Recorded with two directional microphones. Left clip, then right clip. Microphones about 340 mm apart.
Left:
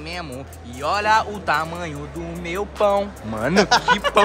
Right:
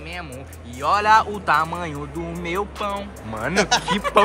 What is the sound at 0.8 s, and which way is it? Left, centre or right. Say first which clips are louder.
Speech: right 2 dB; centre.